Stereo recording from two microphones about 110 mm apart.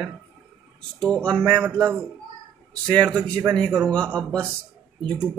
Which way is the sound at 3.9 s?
10° left (ahead or behind).